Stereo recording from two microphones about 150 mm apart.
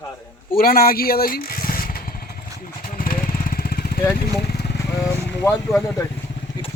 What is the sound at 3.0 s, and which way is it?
Lawn mower, 75° left (ahead or behind).